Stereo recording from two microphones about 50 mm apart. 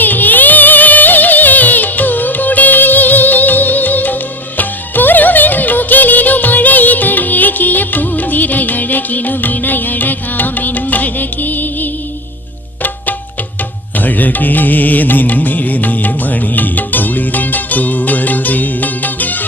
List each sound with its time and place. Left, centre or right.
0.0 s music: left
13.9 s music: left